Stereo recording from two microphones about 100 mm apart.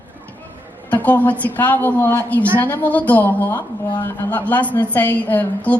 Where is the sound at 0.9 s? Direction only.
15° left (ahead or behind).